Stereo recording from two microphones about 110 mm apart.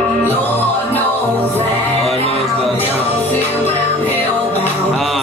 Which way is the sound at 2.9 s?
15° left (ahead or behind).